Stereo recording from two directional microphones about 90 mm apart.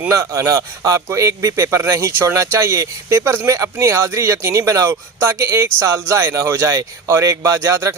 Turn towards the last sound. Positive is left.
turn(degrees=-30)  # may be behind; listen again after turning